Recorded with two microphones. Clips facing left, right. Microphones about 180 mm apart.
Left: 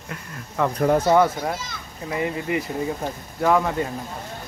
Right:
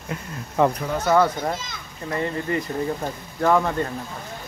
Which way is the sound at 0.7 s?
55° left (ahead or behind).